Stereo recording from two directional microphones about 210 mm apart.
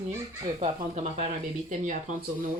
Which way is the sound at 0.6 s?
35° right (ahead or behind).